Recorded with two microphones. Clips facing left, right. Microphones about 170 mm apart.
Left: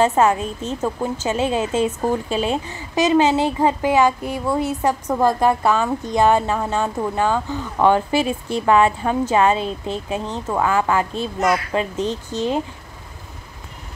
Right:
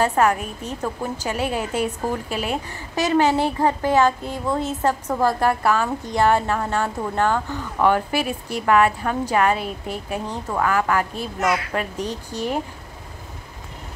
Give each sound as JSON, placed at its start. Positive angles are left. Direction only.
{"t": 0.0, "sound": "a woman's voice", "side_deg": 20}